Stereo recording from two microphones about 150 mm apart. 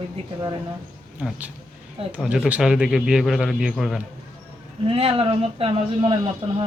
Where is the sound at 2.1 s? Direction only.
5° right (ahead or behind).